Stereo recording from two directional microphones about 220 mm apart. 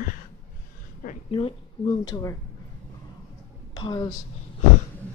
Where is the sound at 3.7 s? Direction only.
20° left (ahead or behind).